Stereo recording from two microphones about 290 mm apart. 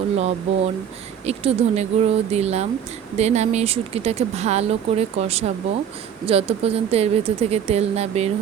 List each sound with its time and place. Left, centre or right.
0.2 s speech: right